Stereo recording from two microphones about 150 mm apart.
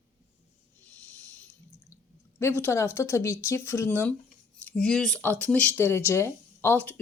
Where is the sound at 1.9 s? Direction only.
20° left (ahead or behind).